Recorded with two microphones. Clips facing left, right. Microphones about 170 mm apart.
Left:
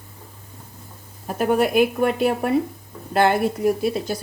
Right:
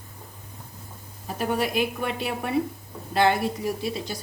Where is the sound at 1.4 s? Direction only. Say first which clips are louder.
Left 7 dB; 55° left (ahead or behind).